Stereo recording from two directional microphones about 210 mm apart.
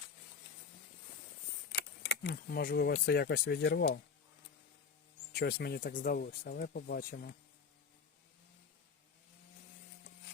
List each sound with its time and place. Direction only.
1.7 s keys jangling: 50° left (ahead or behind)
2.9 s speech: 50° left (ahead or behind)
5.3 s speech: 50° left (ahead or behind)